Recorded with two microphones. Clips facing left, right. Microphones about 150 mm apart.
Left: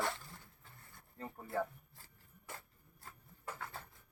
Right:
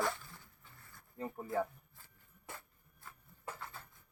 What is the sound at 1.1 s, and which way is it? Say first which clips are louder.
Speech: right 6 dB; 10° right (ahead or behind).